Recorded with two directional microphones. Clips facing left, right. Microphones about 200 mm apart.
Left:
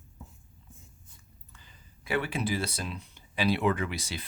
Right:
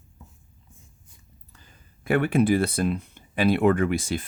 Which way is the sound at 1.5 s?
45° right (ahead or behind).